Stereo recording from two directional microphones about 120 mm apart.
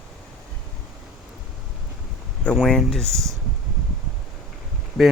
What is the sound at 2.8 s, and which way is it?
Speech, 5° left (ahead or behind).